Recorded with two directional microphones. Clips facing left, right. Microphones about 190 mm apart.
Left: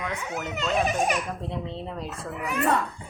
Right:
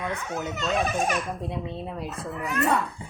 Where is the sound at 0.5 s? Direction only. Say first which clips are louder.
Left 2 dB; 15° left (ahead or behind).